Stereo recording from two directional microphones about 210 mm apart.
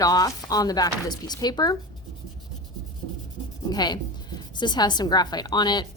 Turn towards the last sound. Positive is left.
turn(degrees=20)  # may be behind; listen again after turning